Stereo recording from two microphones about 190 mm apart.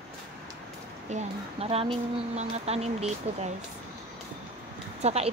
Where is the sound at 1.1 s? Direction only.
35° right (ahead or behind).